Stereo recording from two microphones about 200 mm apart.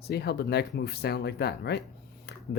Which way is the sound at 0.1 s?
55° left (ahead or behind).